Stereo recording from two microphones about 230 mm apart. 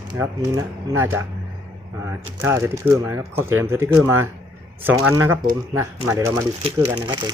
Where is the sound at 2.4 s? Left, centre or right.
Centre.